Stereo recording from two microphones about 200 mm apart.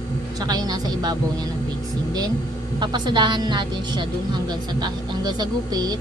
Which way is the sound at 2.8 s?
20° right (ahead or behind).